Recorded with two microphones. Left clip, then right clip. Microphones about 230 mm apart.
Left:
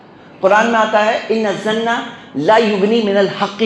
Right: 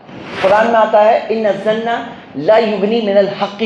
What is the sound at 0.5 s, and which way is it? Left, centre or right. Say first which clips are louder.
A man's voice: right 3 dB; left.